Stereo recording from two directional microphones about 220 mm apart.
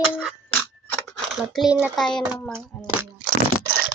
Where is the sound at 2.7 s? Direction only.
5° left (ahead or behind).